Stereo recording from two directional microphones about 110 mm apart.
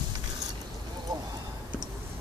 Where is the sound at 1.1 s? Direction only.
35° right (ahead or behind).